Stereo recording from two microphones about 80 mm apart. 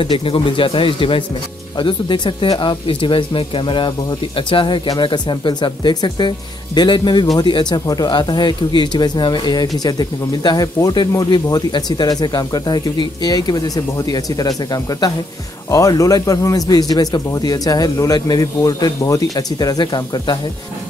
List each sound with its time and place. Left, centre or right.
0.0 s speech: left
4.8 s speech: left
7.8 s a man's voice: left
8.1 s a man's voice: left